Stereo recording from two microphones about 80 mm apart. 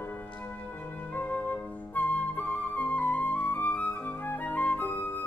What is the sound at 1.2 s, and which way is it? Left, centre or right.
Flute, left.